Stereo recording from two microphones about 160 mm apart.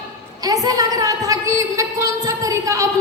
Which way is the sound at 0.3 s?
25° right (ahead or behind).